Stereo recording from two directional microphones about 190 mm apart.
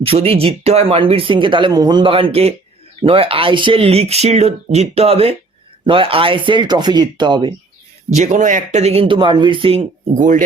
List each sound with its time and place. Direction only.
0.0 s speech: 30° right (ahead or behind)
8.1 s speech: 40° right (ahead or behind)
10.2 s speech: 40° right (ahead or behind)